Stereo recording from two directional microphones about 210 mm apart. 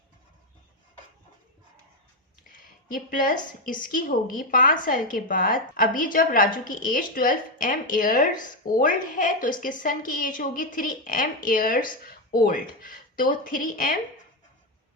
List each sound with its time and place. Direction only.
2.5 s a woman's voice: 40° left (ahead or behind)